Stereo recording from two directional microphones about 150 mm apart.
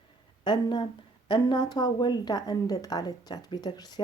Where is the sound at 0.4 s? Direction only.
30° left (ahead or behind).